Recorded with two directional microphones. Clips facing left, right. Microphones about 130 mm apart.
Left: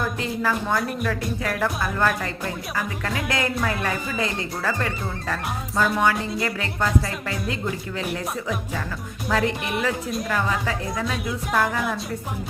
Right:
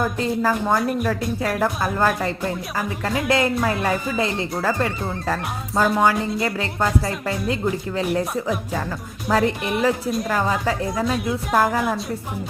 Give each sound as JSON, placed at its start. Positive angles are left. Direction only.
{"t": 0.0, "sound": "speech", "side_deg": -35}